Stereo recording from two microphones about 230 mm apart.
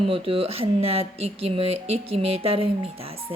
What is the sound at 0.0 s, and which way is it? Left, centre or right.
Speech, right.